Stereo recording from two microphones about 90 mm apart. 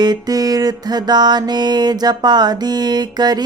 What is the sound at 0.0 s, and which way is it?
Music, 50° right (ahead or behind).